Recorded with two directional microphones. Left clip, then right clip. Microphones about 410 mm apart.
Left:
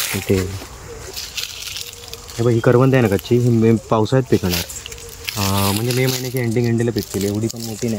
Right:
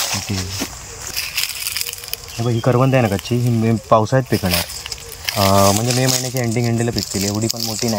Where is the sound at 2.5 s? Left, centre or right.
Centre.